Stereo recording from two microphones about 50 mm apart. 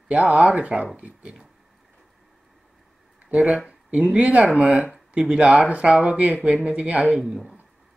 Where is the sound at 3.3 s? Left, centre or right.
Right.